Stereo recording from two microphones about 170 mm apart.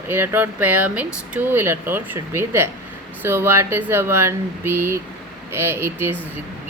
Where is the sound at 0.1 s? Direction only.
15° right (ahead or behind).